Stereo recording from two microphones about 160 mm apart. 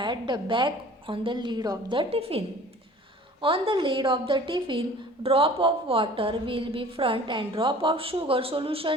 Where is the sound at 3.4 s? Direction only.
35° right (ahead or behind).